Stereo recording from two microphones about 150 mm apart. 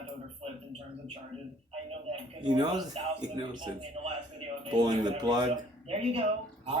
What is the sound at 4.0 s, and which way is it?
Speech, 45° right (ahead or behind).